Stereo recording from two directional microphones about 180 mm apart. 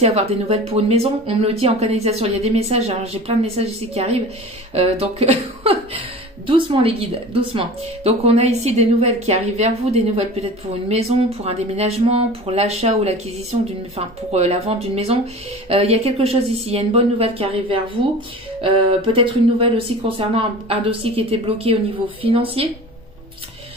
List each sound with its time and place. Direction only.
0.0 s a woman's voice: 35° right (ahead or behind)